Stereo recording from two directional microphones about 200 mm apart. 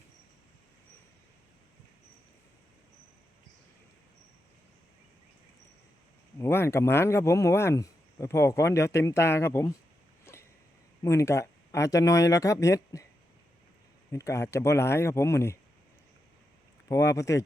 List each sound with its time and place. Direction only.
6.4 s speech: 10° left (ahead or behind)
10.3 s a sound: 15° left (ahead or behind)
11.0 s speech: 15° left (ahead or behind)
14.1 s speech: 15° left (ahead or behind)
16.9 s speech: 15° left (ahead or behind)